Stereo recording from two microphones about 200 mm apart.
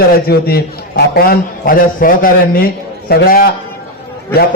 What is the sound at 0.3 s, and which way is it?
A man's voice, 50° left (ahead or behind).